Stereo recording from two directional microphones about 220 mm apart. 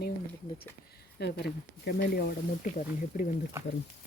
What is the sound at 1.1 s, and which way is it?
Speech, 50° left (ahead or behind).